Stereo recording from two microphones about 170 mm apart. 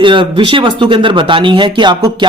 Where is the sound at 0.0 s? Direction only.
30° right (ahead or behind).